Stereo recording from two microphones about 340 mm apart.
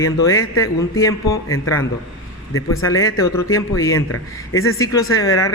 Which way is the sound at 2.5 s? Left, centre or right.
Left.